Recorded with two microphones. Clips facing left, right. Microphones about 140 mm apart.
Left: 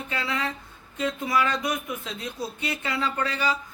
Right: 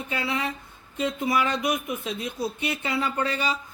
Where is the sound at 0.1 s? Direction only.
20° right (ahead or behind).